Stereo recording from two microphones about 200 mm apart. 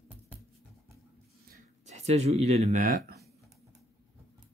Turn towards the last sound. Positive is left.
turn(degrees=-40)  # may be behind; listen again after turning